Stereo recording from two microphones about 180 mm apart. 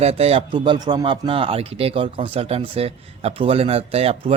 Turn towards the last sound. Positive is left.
turn(degrees=-35)  # may be behind; listen again after turning